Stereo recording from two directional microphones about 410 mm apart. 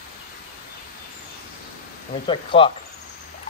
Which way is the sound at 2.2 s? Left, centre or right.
Centre.